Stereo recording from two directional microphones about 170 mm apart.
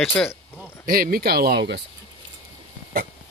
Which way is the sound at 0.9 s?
60° right (ahead or behind).